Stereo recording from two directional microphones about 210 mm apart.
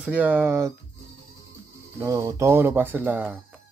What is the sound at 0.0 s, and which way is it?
Speech, 5° right (ahead or behind).